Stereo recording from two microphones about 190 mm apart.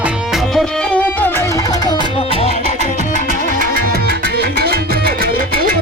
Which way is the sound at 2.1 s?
30° left (ahead or behind).